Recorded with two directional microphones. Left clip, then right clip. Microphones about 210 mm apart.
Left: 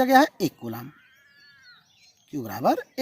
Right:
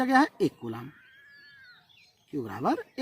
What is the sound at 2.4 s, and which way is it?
Speech, 30° left (ahead or behind).